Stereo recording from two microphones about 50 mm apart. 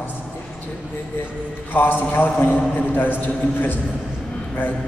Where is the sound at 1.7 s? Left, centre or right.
Left.